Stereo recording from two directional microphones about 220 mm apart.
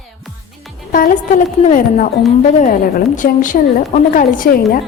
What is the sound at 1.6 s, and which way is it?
A woman's voice, 35° left (ahead or behind).